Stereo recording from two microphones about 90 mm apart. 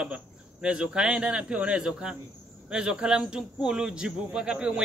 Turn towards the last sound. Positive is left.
turn(degrees=-10)  # may be behind; listen again after turning